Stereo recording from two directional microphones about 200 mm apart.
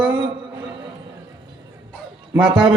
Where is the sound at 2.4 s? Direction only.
25° right (ahead or behind).